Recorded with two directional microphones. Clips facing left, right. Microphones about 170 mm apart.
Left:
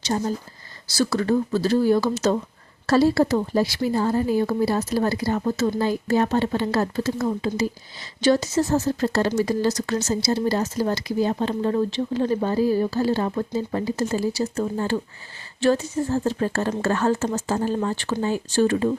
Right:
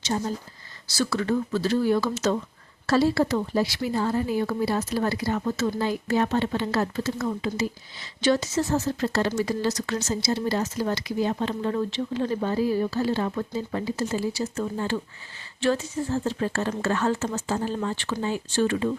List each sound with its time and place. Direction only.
0.0 s speech: 40° left (ahead or behind)